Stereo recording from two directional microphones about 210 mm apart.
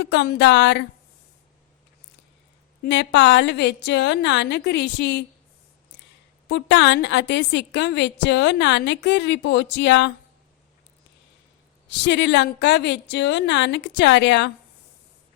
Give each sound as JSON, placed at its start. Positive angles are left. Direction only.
{"t": 0.0, "sound": "a woman's voice", "side_deg": 55}
{"t": 2.8, "sound": "a woman's voice", "side_deg": 55}
{"t": 6.5, "sound": "a woman's voice", "side_deg": 55}
{"t": 11.9, "sound": "a woman's voice", "side_deg": 55}